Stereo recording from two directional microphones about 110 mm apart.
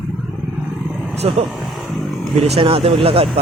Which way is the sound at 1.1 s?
70° right (ahead or behind).